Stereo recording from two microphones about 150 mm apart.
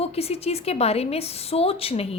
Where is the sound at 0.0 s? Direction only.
45° left (ahead or behind).